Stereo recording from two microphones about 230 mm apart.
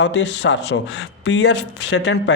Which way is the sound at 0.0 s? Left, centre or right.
Left.